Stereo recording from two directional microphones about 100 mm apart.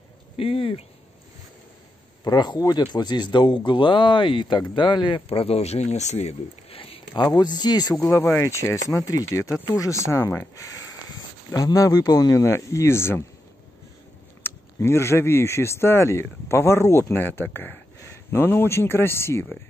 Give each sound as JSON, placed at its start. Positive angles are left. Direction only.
{"t": 0.4, "sound": "speech", "side_deg": 65}
{"t": 2.2, "sound": "speech", "side_deg": 45}
{"t": 5.3, "sound": "speech", "side_deg": 75}
{"t": 7.2, "sound": "speech", "side_deg": 50}
{"t": 14.4, "sound": "speech", "side_deg": 25}